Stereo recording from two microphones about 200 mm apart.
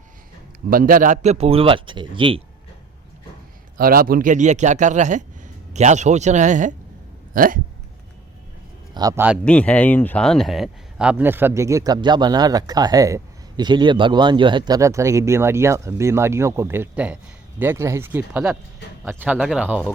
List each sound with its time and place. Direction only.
0.7 s a man's voice: 45° right (ahead or behind); by 2.4 s 25° right (ahead or behind)
3.8 s a man's voice: 45° right (ahead or behind)
9.0 s a man's voice: 15° right (ahead or behind)
9.4 s a man's voice: 5° left (ahead or behind)